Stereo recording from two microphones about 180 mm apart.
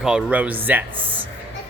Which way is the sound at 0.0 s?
5° right (ahead or behind).